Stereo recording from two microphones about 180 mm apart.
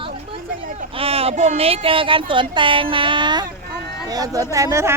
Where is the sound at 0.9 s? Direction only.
35° right (ahead or behind).